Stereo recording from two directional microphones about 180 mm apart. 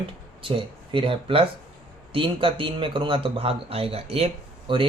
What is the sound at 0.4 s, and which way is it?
Speech, 30° right (ahead or behind).